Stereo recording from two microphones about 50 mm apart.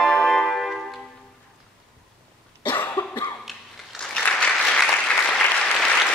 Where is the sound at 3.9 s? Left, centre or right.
Centre.